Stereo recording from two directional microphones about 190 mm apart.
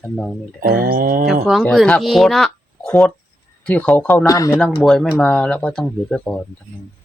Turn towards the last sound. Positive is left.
turn(degrees=5)  # may be behind; listen again after turning